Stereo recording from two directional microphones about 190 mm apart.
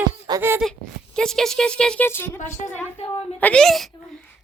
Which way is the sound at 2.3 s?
40° left (ahead or behind).